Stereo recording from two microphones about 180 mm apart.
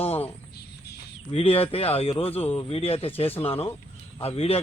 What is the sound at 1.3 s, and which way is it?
Speech, 30° left (ahead or behind).